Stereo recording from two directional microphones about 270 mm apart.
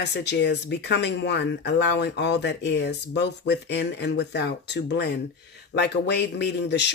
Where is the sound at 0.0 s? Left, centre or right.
Left.